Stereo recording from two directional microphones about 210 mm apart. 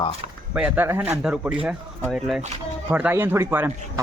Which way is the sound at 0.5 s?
10° right (ahead or behind).